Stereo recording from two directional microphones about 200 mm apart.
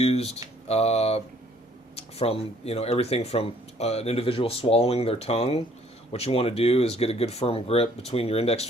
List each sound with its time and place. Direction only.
0.0 s speech: 30° left (ahead or behind)